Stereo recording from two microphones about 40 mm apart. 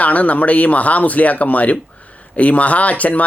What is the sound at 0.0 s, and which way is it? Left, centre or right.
Speech, left.